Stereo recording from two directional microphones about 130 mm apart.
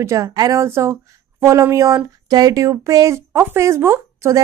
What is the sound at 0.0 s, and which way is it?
Speech, 25° right (ahead or behind).